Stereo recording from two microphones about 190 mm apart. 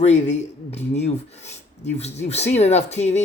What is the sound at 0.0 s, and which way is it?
Speech, 35° left (ahead or behind).